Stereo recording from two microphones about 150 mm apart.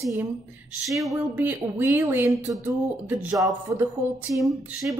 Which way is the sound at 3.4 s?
20° right (ahead or behind).